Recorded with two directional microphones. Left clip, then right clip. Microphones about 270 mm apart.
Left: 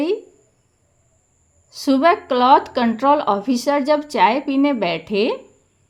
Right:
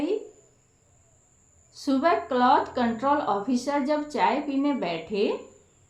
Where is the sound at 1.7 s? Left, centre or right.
Left.